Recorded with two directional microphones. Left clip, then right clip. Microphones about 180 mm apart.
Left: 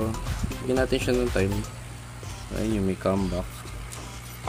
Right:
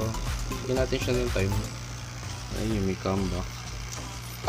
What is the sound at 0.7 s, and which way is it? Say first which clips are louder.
Speech: left 3 dB; 30° left (ahead or behind).